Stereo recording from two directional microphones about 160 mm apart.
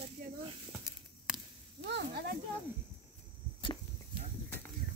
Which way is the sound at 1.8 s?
80° right.